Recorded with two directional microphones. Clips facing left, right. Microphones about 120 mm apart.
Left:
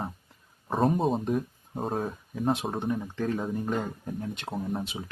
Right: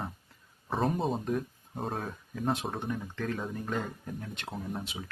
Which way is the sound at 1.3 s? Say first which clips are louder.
Left 3 dB; 20° left (ahead or behind).